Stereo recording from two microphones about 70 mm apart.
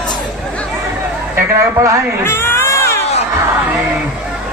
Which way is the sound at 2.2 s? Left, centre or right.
Left.